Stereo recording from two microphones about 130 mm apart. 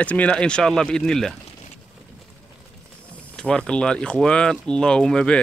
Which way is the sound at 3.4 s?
5° left (ahead or behind).